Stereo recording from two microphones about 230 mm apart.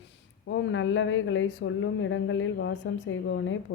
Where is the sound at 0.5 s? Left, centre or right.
Left.